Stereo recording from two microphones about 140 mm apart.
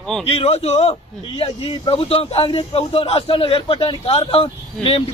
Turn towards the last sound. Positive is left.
turn(degrees=40)  # may be behind; listen again after turning